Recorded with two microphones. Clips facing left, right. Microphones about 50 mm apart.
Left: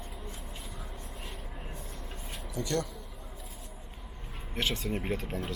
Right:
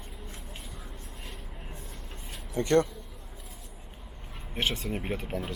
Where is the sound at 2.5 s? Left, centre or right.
Right.